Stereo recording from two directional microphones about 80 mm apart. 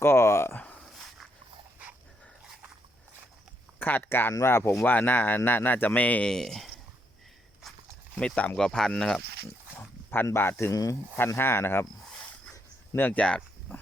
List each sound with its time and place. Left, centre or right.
0.0 s speech: left
0.5 s a sound: left
0.9 s dog: centre
3.8 s speech: left; by 6.7 s centre
7.6 s walk: centre
8.2 s speech: centre
10.2 s speech: left
10.7 s speech: left
11.3 s speech: left
13.0 s speech: centre